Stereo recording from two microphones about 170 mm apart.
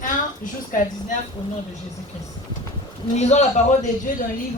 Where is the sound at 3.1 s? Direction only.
40° left (ahead or behind).